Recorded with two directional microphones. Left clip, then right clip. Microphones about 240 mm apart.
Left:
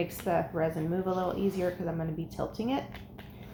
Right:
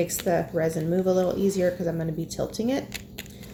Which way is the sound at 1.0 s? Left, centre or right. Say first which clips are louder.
Right 8 dB; right.